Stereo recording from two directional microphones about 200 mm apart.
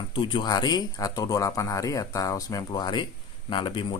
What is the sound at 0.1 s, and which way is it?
Speech, 25° left (ahead or behind).